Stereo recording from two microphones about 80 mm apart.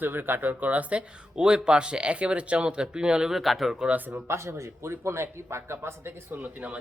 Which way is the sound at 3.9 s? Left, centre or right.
Right.